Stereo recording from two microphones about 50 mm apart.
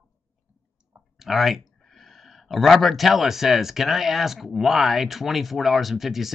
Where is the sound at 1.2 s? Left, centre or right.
Centre.